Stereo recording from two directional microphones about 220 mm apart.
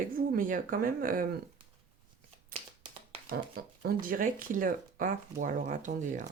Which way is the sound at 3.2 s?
40° right (ahead or behind).